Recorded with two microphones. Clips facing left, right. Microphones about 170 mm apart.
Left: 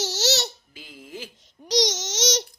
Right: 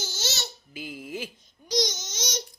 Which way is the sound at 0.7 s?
10° right (ahead or behind).